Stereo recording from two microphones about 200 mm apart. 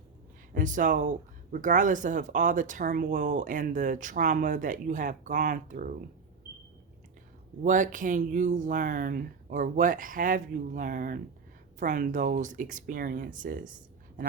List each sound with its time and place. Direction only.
0.5 s speech: 40° right (ahead or behind)
7.6 s speech: 40° right (ahead or behind)